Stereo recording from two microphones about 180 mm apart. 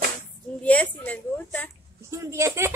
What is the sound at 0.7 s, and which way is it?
A woman's voice, 10° left (ahead or behind).